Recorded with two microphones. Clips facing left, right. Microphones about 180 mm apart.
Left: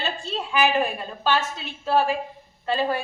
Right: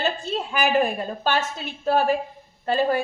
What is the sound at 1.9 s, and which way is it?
A woman's voice, 45° right (ahead or behind).